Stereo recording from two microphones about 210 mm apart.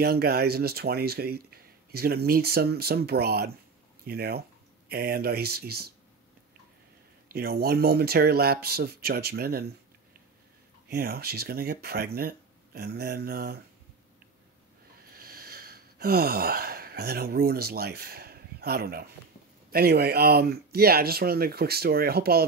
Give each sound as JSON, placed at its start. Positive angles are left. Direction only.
{"t": 0.0, "sound": "speech", "side_deg": -45}
{"t": 7.2, "sound": "speech", "side_deg": -45}
{"t": 10.9, "sound": "speech", "side_deg": -45}
{"t": 15.0, "sound": "a sound", "side_deg": -45}
{"t": 19.7, "sound": "speech", "side_deg": -50}